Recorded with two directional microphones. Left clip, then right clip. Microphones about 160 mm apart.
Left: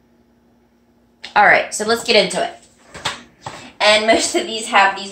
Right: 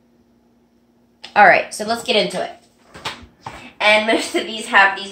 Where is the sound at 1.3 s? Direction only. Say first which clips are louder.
Right 1 dB; 30° right (ahead or behind).